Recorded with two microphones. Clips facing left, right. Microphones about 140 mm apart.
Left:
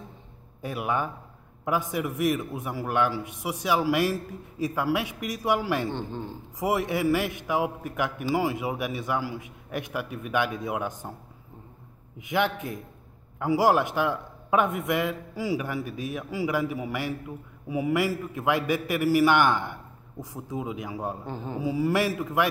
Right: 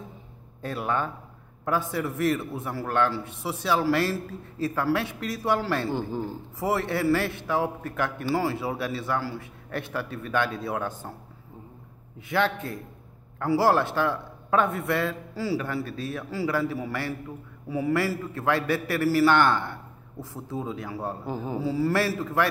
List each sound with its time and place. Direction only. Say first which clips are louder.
0.6 s a man's voice: even; 15° left (ahead or behind)
5.9 s speech: right 4 dB; 5° right (ahead or behind)
6.6 s a man's voice: even; 15° left (ahead or behind)
12.2 s a man's voice: right 1 dB; 15° left (ahead or behind)
21.3 s speech: right 3 dB; 5° right (ahead or behind)
21.5 s a man's voice: even; 15° left (ahead or behind)